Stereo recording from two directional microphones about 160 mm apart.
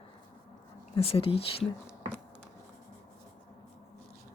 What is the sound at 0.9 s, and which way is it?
Speech, 35° left (ahead or behind).